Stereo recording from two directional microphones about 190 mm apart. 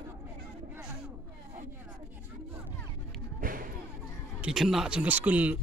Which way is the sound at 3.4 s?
50° right (ahead or behind).